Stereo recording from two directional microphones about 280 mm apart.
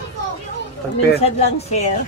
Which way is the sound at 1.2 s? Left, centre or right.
Left.